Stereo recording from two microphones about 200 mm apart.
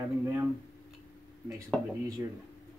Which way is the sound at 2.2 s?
15° right (ahead or behind).